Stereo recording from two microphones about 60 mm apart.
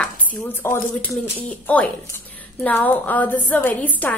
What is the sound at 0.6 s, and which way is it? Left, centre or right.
Speech, left.